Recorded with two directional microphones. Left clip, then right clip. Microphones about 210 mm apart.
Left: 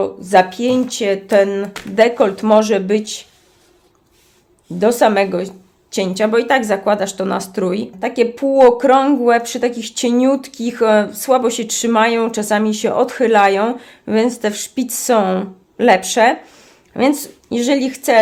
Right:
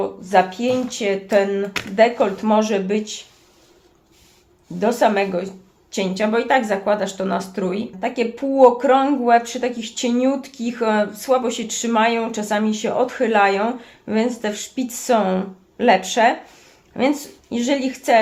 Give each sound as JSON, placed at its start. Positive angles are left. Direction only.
{"t": 0.0, "sound": "speech", "side_deg": 55}
{"t": 4.8, "sound": "speech", "side_deg": 50}